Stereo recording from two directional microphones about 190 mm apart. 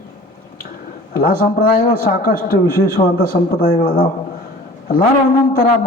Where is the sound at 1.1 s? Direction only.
50° left (ahead or behind).